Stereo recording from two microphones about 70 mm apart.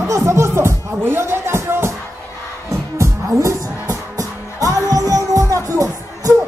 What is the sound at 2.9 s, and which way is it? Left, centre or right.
Music, right.